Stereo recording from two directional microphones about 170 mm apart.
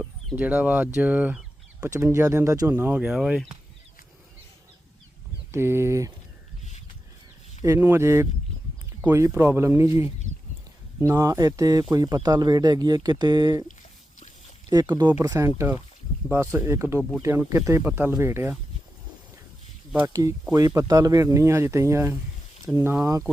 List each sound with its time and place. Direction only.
0.3 s speech: 10° right (ahead or behind)
0.9 s chicken: 10° right (ahead or behind)
1.9 s speech: 15° right (ahead or behind)
5.5 s speech: 15° right (ahead or behind)
7.6 s speech: 15° right (ahead or behind)
14.7 s speech: 25° right (ahead or behind)
17.0 s speech: 5° left (ahead or behind)
17.2 s speech: 15° right (ahead or behind)
19.9 s speech: 15° right (ahead or behind)